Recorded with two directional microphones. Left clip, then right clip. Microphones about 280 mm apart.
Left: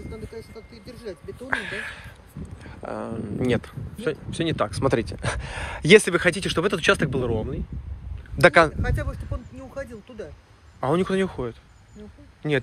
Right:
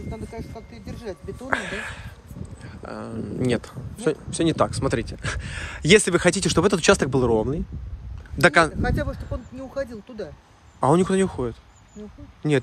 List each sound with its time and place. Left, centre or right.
1.0 s speech: right
2.6 s speech: centre
8.4 s speech: centre
8.8 s speech: right
10.8 s speech: centre